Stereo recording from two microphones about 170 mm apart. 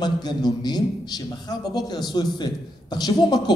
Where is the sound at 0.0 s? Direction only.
25° left (ahead or behind).